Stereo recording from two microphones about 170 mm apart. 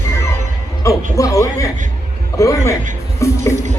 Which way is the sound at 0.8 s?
20° left (ahead or behind).